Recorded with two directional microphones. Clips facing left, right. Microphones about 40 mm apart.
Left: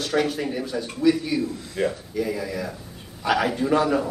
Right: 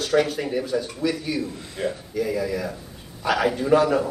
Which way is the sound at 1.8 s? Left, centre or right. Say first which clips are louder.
Left 3 dB; left.